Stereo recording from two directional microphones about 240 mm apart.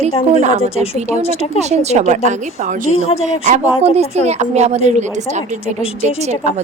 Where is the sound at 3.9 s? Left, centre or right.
Right.